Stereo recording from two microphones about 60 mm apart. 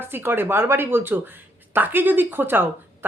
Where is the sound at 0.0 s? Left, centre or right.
Right.